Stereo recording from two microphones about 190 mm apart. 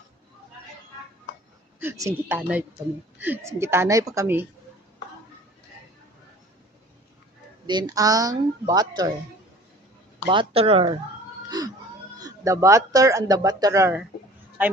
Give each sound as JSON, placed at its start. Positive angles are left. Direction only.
{"t": 1.8, "sound": "speech", "side_deg": -15}
{"t": 7.7, "sound": "speech", "side_deg": -20}
{"t": 10.2, "sound": "speech", "side_deg": -30}
{"t": 11.4, "sound": "a sound", "side_deg": -20}
{"t": 12.2, "sound": "speech", "side_deg": -15}